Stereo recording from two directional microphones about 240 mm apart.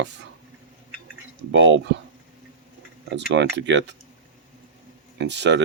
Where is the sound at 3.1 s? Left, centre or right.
Right.